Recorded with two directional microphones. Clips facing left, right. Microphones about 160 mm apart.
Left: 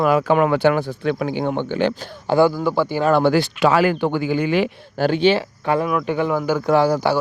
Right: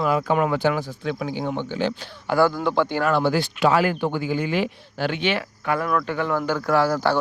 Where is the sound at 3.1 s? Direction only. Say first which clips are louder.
Left 5 dB; 70° left (ahead or behind).